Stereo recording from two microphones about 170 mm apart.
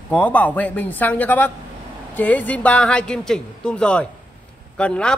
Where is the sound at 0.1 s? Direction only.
10° left (ahead or behind).